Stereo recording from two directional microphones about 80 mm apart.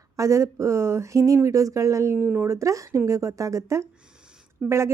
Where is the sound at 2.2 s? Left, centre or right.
Right.